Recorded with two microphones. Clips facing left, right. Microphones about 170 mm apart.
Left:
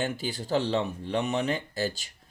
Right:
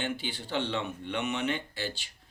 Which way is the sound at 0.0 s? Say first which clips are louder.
Left 4 dB; 40° left (ahead or behind).